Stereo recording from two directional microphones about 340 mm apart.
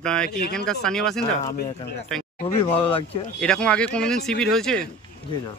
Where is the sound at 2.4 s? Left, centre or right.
Centre.